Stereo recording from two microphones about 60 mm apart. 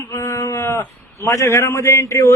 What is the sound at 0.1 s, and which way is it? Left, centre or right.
A man's voice, left.